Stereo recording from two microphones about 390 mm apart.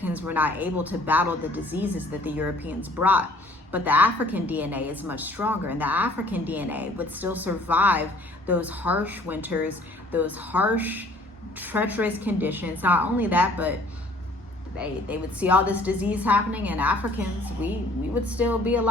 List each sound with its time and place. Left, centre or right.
0.0 s a woman's voice: centre
14.8 s a woman's voice: centre